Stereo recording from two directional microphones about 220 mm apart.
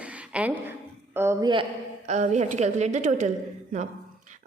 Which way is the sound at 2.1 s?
30° right (ahead or behind).